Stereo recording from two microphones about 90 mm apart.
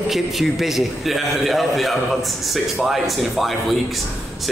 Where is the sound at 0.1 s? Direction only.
5° right (ahead or behind).